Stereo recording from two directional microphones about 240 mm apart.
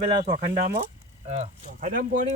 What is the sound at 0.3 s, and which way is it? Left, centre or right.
Speech, right.